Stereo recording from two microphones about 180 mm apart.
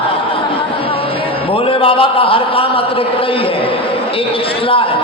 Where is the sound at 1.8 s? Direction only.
30° left (ahead or behind).